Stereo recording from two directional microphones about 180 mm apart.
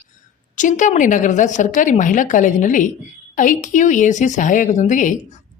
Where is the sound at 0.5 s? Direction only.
45° left (ahead or behind).